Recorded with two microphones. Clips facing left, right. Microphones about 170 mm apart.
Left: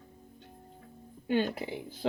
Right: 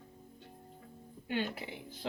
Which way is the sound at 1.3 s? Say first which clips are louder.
Left 7 dB; 35° left (ahead or behind).